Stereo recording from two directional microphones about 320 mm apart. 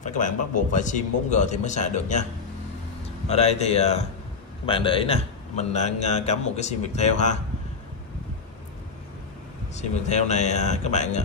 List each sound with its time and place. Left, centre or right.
0.0 s a sound: left
0.7 s a man's voice: left
3.3 s a man's voice: centre
9.8 s a man's voice: left